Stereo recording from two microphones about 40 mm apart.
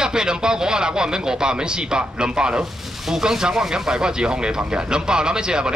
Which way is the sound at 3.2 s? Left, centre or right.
Centre.